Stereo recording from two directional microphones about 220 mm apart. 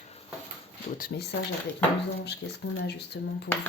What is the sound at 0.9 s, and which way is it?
Speech, 40° left (ahead or behind).